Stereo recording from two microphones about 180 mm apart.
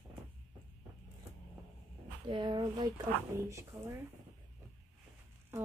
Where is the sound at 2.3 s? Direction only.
25° right (ahead or behind).